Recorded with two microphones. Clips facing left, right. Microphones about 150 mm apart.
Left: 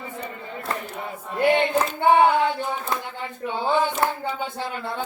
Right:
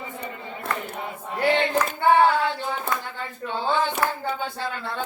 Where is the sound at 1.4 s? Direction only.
20° left (ahead or behind).